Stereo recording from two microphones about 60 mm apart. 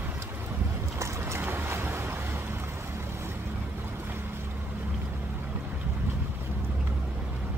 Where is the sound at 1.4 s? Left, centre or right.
Right.